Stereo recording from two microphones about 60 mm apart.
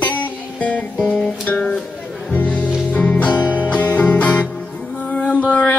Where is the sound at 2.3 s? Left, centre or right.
Left.